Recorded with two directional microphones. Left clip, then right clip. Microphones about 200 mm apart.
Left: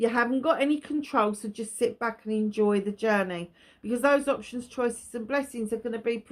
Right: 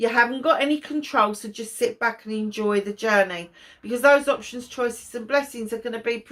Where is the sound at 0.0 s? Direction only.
50° left (ahead or behind).